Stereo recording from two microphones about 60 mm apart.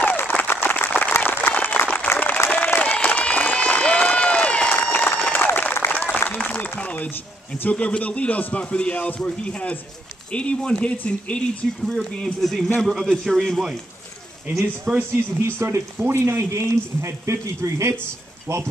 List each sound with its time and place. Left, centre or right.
0.3 s a sound: left
1.1 s applause: left
4.8 s run: left
5.5 s applause: left
7.1 s a man's voice: left
7.7 s a man's voice: left
11.6 s a man's voice: centre
15.4 s a man's voice: right
18.5 s speech: right